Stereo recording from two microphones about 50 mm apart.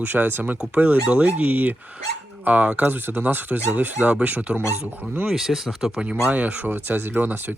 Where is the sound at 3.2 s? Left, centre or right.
Right.